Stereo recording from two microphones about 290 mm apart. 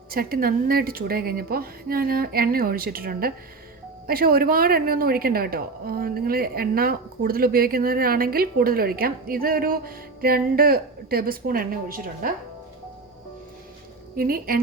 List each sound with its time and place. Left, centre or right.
0.1 s speech: right
14.2 s speech: right